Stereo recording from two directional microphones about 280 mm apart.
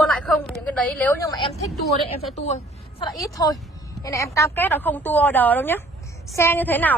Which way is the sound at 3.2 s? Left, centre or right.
Centre.